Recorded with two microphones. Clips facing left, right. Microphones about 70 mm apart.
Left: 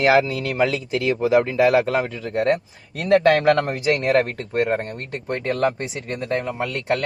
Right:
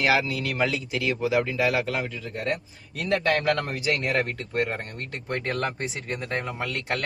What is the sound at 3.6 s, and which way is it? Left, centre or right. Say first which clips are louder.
Speech: left 6 dB; left.